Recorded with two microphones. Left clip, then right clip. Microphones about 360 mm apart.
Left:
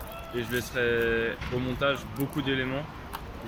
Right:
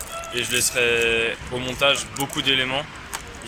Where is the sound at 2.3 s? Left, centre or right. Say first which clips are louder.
Right 10 dB; centre.